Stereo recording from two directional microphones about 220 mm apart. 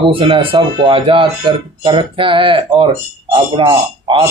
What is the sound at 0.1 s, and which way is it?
Speech, 25° right (ahead or behind).